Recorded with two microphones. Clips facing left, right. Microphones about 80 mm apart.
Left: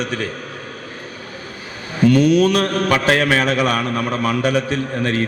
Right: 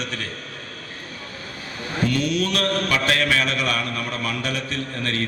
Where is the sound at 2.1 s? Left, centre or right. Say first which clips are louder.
Left 11 dB; centre.